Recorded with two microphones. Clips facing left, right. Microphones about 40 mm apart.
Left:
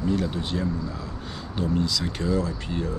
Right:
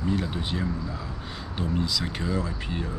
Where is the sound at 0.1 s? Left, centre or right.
Centre.